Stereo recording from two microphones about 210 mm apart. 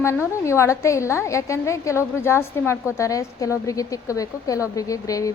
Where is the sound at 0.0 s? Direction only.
15° left (ahead or behind).